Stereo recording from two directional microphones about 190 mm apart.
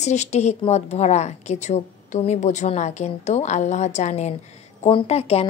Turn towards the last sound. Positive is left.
turn(degrees=30)  # may be behind; listen again after turning